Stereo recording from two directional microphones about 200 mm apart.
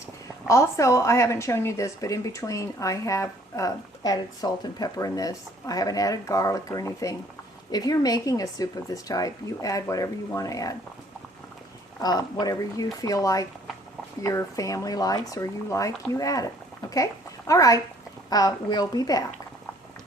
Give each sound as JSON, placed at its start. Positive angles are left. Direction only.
{"t": 0.4, "sound": "speech", "side_deg": 15}
{"t": 12.0, "sound": "a woman's voice", "side_deg": 20}